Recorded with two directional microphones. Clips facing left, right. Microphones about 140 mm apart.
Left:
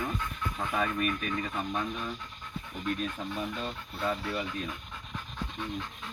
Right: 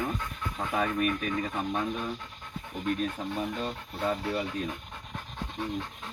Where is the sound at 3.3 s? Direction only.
30° right (ahead or behind).